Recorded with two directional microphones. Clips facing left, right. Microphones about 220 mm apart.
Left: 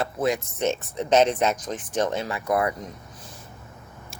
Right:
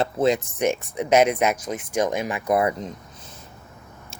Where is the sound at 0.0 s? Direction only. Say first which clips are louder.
Right 4 dB; 25° right (ahead or behind).